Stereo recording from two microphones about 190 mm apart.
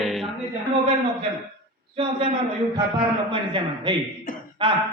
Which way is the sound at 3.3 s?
25° right (ahead or behind).